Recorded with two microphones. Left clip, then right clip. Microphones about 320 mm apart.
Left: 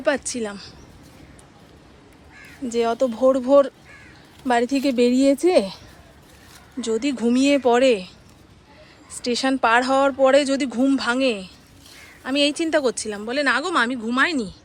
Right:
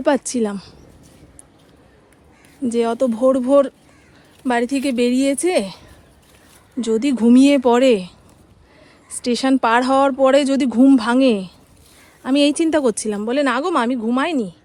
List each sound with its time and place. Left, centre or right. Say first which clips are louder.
0.0 s speech: right 5 dB; centre
2.6 s a woman's voice: right 2 dB; centre
6.8 s speech: right 5 dB; centre
9.2 s speech: right 3 dB; centre